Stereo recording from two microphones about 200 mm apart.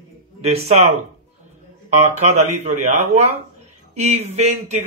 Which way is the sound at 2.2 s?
35° right (ahead or behind).